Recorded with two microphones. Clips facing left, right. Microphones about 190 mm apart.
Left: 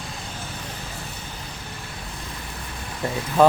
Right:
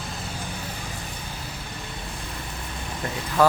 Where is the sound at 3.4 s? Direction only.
20° left (ahead or behind).